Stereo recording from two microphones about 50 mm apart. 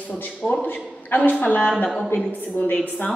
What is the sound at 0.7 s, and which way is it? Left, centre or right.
A man's voice, left.